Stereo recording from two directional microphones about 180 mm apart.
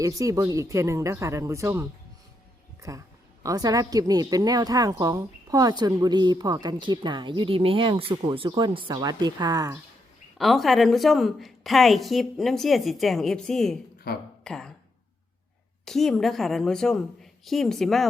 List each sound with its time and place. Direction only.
0.0 s a woman's voice: 20° right (ahead or behind)
10.3 s a woman's voice: centre (ahead or behind)
14.1 s speech: 55° left (ahead or behind)
14.4 s speech: 5° left (ahead or behind)
15.8 s a woman's voice: centre (ahead or behind)